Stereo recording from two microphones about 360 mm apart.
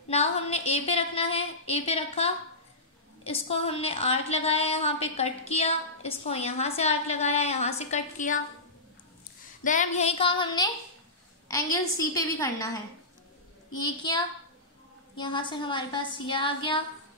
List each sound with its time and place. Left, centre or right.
0.1 s a woman's voice: centre
9.6 s a woman's voice: left